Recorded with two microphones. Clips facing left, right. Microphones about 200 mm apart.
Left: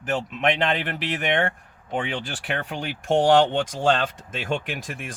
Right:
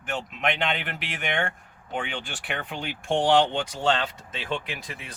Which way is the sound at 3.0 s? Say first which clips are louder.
Left 4 dB; 45° left (ahead or behind).